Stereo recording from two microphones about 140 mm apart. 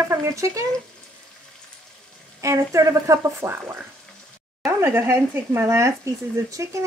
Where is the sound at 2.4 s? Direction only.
20° right (ahead or behind).